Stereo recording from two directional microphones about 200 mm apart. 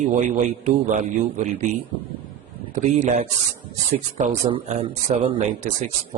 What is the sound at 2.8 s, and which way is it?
Speech, 35° right (ahead or behind).